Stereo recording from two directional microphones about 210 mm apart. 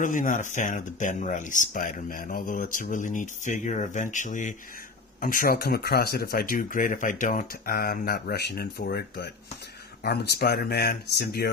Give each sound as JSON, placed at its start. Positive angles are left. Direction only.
{"t": 0.0, "sound": "speech", "side_deg": 40}